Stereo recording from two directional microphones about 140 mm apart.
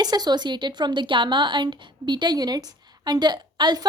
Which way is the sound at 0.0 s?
30° right (ahead or behind).